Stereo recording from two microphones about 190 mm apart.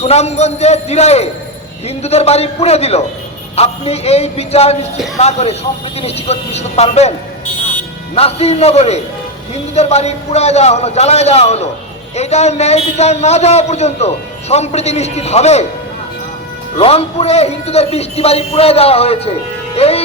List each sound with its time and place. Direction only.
0.0 s a man's voice: 35° left (ahead or behind)
8.1 s a man's voice: 30° left (ahead or behind)
16.7 s a man's voice: 30° left (ahead or behind)